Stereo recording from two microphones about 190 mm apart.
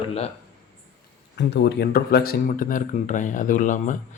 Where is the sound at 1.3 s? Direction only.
65° left (ahead or behind); by 4.0 s 40° left (ahead or behind).